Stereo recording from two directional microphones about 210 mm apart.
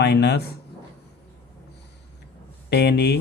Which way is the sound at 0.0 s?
50° left (ahead or behind).